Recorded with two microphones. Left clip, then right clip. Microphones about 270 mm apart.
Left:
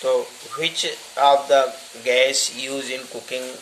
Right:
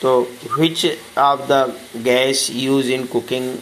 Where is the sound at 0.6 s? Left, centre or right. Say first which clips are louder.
Right 5 dB; centre.